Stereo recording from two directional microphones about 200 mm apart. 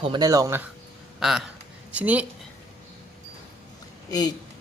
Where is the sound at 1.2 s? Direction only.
Centre (ahead or behind).